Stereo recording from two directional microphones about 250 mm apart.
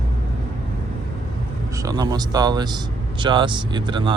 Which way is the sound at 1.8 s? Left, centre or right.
Centre.